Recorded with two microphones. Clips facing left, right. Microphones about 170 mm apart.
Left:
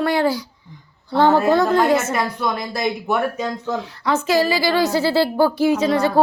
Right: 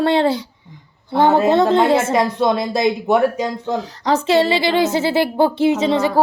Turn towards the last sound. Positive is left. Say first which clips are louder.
# right 1 dB
turn(degrees=-20)  # may be behind; listen again after turning